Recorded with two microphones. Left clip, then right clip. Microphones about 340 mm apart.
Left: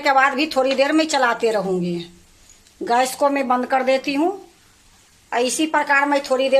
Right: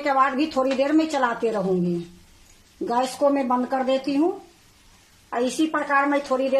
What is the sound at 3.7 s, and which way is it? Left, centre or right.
Speech, left.